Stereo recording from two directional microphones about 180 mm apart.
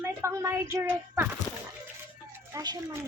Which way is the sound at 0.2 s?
15° right (ahead or behind).